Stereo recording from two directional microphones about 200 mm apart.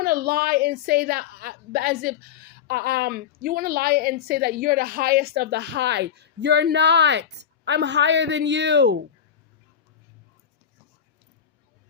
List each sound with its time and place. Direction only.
0.0 s a woman's voice: 50° right (ahead or behind)